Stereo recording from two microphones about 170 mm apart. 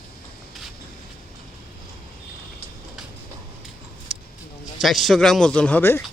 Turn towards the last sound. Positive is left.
turn(degrees=10)  # may be behind; listen again after turning